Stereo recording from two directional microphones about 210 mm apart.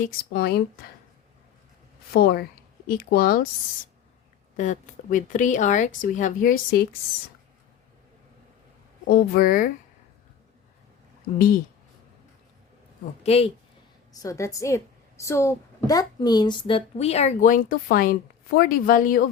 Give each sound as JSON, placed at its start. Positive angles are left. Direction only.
{"t": 0.0, "sound": "speech", "side_deg": 45}
{"t": 2.1, "sound": "a woman's voice", "side_deg": 50}
{"t": 4.5, "sound": "speech", "side_deg": 35}
{"t": 9.0, "sound": "speech", "side_deg": 45}
{"t": 13.2, "sound": "speech", "side_deg": 30}
{"t": 14.2, "sound": "a woman's voice", "side_deg": 15}